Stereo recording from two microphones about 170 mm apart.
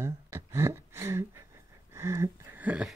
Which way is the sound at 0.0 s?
15° right (ahead or behind).